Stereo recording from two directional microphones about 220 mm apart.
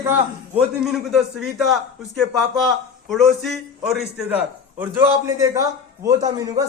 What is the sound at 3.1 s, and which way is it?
A man's voice, centre (ahead or behind).